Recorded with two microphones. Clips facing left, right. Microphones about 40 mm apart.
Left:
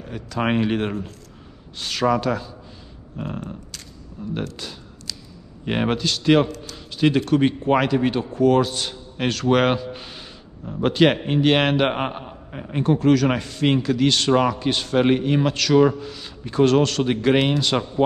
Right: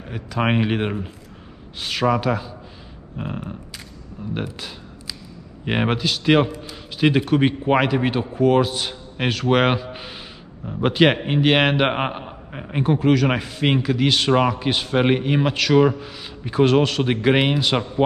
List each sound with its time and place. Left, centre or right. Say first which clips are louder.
0.0 s a man's voice: right 1 dB; centre